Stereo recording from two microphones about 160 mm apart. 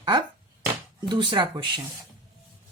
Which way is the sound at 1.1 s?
30° right (ahead or behind).